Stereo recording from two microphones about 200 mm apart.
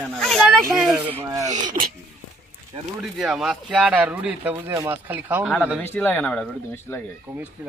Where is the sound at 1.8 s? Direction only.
35° right (ahead or behind).